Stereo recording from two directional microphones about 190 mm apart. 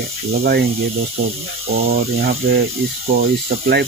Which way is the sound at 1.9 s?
55° right (ahead or behind).